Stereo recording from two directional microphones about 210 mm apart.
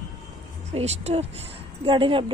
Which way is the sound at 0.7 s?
30° right (ahead or behind).